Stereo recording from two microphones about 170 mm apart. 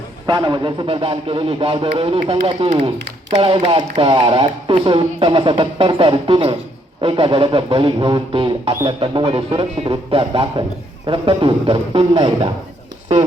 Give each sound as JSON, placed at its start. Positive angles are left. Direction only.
{"t": 0.3, "sound": "speech", "side_deg": -25}